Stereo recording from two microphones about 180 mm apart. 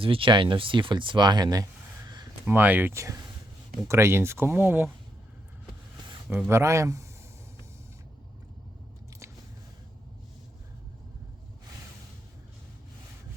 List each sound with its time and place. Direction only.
0.0 s speech: 30° right (ahead or behind)
2.4 s speech: 10° right (ahead or behind)
6.5 s speech: 15° right (ahead or behind)